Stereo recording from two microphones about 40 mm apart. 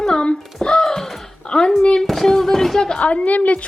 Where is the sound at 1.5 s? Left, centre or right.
Centre.